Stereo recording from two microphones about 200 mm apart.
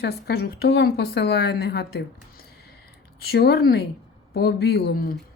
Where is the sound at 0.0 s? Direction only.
55° left (ahead or behind).